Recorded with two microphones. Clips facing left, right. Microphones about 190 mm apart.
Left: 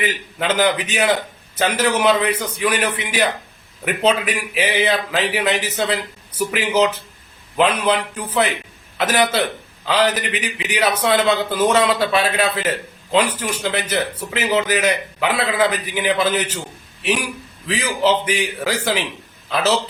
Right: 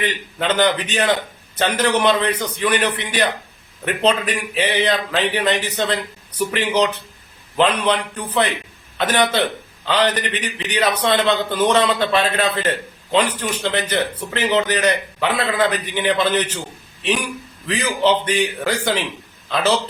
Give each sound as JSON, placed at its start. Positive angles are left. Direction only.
{"t": 0.0, "sound": "a man's voice", "side_deg": 10}